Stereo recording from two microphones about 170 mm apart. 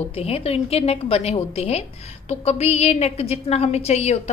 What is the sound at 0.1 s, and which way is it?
A woman's voice, 35° left (ahead or behind).